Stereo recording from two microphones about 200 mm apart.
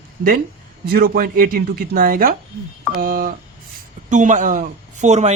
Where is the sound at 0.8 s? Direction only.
50° right (ahead or behind).